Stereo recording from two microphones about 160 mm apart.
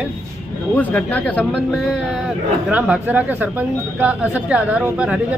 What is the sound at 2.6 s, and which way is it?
Speech, 5° right (ahead or behind).